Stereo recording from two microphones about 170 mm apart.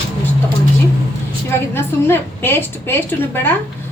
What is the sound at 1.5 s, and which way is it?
A woman's voice, 15° left (ahead or behind).